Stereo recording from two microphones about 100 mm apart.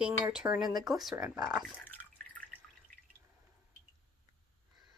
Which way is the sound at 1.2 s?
40° right (ahead or behind).